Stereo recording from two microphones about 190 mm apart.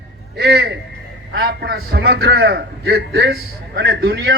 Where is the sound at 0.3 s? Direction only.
60° right (ahead or behind).